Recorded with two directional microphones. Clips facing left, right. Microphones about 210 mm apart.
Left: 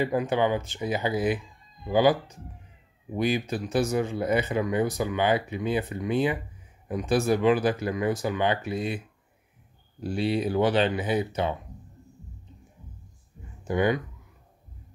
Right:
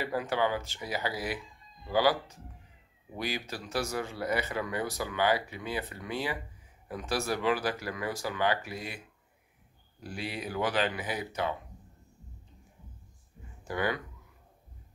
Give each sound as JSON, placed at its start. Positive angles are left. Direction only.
{"t": 0.0, "sound": "speech", "side_deg": 20}
{"t": 10.0, "sound": "speech", "side_deg": 25}
{"t": 13.7, "sound": "speech", "side_deg": 20}